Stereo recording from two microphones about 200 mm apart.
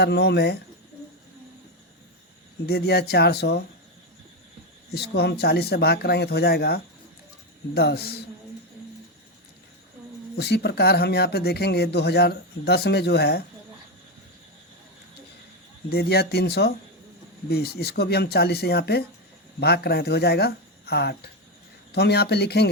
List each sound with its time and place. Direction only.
0.0 s speech: 55° left (ahead or behind)
2.6 s speech: 50° left (ahead or behind)
4.9 s speech: 55° left (ahead or behind)
10.3 s speech: 55° left (ahead or behind)
15.9 s speech: 50° left (ahead or behind)